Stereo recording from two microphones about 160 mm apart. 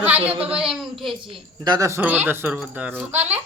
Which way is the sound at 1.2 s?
30° right (ahead or behind).